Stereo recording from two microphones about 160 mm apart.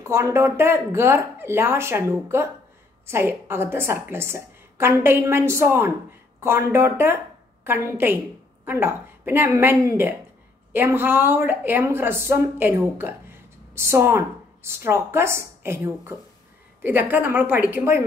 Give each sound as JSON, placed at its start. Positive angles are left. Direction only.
{"t": 0.0, "sound": "a woman's voice", "side_deg": -15}